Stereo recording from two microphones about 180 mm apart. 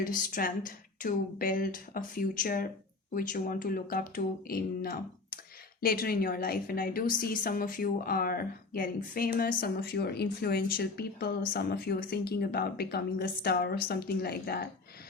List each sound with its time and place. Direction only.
0.0 s a woman's voice: 50° left (ahead or behind)